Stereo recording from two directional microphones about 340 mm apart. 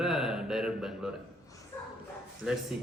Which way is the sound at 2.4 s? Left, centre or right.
Centre.